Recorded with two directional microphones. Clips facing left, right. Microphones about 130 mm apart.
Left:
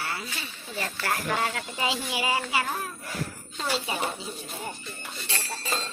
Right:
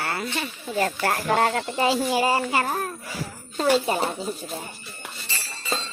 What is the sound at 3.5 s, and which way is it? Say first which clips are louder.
Speech: right 10 dB; 45° right (ahead or behind).